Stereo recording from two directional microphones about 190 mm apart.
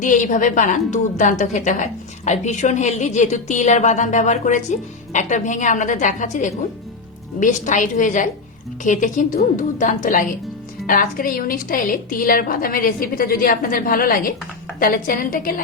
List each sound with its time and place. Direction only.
0.0 s a woman's voice: 40° left (ahead or behind)